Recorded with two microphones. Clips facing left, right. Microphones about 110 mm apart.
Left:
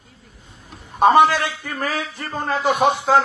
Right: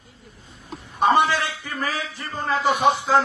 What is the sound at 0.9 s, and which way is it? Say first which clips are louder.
A man's voice: left 5 dB; 50° left (ahead or behind).